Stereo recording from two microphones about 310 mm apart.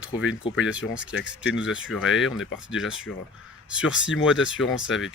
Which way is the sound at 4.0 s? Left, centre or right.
Left.